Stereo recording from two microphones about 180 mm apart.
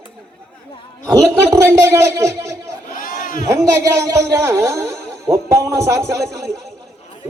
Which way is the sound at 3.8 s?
15° right (ahead or behind).